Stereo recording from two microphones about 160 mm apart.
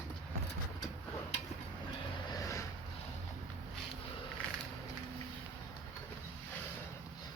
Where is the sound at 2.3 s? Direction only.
20° left (ahead or behind).